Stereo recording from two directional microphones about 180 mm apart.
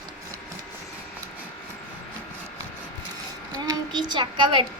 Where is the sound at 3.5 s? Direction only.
20° right (ahead or behind).